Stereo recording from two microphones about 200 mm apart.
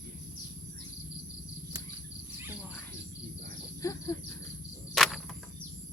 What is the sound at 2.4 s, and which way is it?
Cricket, 10° right (ahead or behind).